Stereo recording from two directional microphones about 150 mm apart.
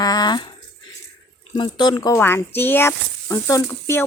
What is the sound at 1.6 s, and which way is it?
Speech, 30° left (ahead or behind).